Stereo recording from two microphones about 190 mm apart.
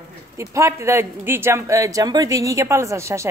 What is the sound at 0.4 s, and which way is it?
Speech, 15° right (ahead or behind).